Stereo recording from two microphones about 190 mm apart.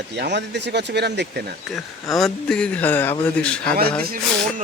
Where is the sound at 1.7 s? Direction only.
Centre (ahead or behind).